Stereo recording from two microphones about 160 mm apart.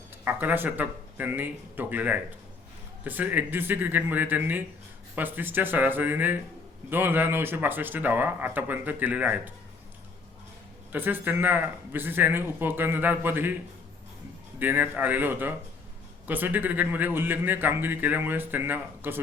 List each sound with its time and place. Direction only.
0.3 s a man's voice: 10° right (ahead or behind)
10.9 s a man's voice: 10° right (ahead or behind)
14.6 s a man's voice: 10° right (ahead or behind)